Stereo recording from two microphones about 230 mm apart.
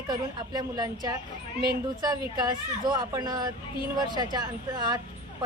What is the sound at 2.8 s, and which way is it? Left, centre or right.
A woman's voice, centre.